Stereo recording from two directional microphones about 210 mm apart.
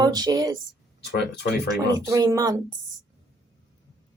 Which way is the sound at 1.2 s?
50° left (ahead or behind).